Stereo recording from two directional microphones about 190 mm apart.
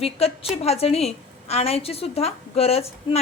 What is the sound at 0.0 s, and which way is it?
A woman's voice, 30° left (ahead or behind).